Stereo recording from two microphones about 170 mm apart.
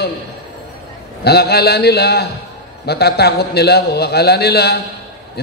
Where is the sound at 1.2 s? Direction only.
70° left (ahead or behind).